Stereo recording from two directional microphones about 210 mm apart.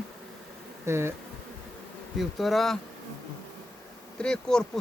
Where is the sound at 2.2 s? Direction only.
Centre (ahead or behind).